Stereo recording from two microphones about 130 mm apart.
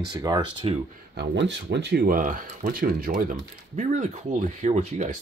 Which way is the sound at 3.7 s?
70° right (ahead or behind).